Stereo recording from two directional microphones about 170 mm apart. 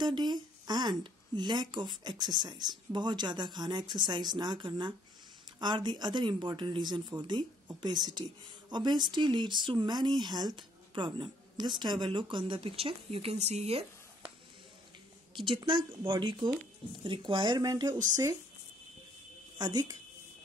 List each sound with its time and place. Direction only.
0.0 s speech: 25° right (ahead or behind)
15.3 s speech: 30° right (ahead or behind)
19.6 s speech: 25° right (ahead or behind)